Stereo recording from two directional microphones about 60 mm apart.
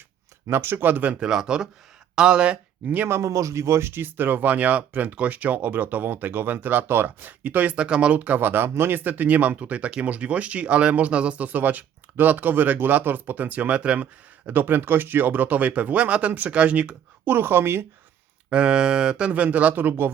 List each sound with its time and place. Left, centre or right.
0.4 s speech: right
1.2 s speech: centre; by 3.1 s right
3.1 s speech: right
17.3 s speech: right
18.5 s speech: centre; by 20.1 s right